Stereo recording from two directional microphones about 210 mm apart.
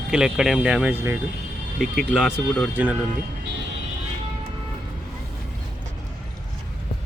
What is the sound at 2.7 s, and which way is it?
Speech, 5° right (ahead or behind).